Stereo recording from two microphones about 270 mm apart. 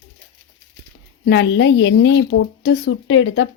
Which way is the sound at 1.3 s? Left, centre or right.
Left.